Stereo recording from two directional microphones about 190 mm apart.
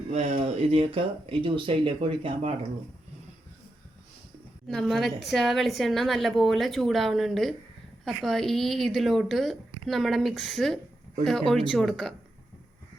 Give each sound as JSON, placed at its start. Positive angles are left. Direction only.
{"t": 0.1, "sound": "speech", "side_deg": -30}
{"t": 4.7, "sound": "a woman's voice", "side_deg": 0}